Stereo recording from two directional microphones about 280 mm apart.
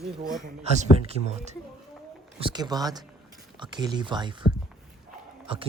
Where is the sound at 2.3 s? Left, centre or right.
Centre.